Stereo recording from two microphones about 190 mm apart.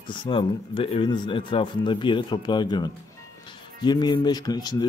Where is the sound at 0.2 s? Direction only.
25° left (ahead or behind).